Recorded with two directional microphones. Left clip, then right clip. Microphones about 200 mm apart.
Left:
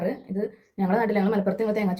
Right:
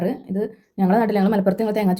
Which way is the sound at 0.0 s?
50° right (ahead or behind).